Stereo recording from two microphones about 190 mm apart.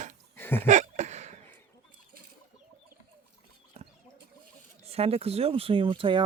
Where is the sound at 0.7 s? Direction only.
40° right (ahead or behind).